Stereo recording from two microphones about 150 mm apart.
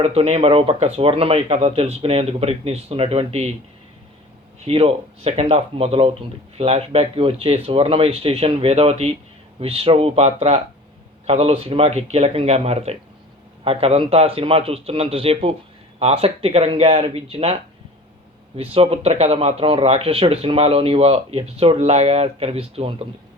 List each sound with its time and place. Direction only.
0.0 s speech: 40° right (ahead or behind)
4.6 s speech: 40° right (ahead or behind)